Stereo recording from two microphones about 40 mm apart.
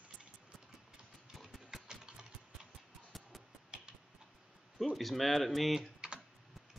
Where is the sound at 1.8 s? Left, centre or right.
Centre.